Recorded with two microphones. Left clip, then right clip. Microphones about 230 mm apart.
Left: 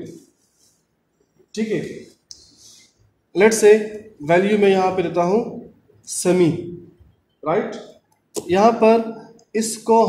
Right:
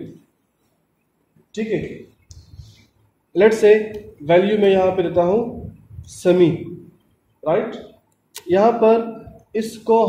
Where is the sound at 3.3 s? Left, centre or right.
Left.